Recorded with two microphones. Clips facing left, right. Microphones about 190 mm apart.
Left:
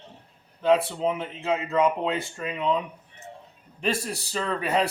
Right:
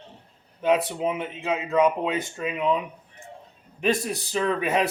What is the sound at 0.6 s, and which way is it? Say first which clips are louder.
Speech: left 1 dB; 20° right (ahead or behind).